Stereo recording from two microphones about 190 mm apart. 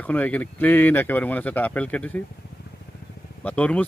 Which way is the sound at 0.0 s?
10° left (ahead or behind).